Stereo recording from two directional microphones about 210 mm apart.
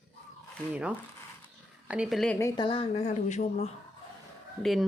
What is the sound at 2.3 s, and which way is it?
Speech, 15° left (ahead or behind).